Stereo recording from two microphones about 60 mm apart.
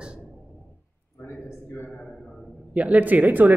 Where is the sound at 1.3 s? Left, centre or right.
Left.